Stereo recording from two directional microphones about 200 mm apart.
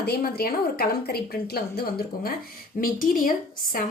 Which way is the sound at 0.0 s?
50° left (ahead or behind).